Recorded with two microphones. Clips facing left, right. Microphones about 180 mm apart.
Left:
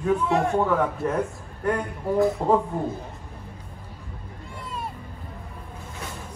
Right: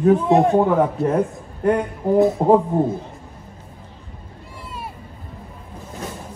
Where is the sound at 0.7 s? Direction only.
30° right (ahead or behind).